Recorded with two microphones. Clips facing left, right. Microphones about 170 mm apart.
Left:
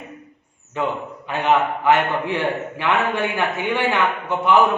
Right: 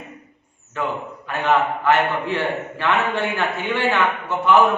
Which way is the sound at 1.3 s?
15° left (ahead or behind).